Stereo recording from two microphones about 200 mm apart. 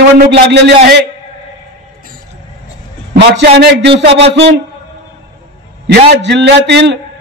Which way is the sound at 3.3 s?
55° right (ahead or behind).